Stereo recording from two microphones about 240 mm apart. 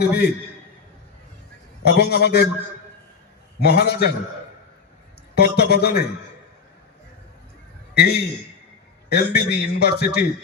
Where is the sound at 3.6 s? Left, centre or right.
Left.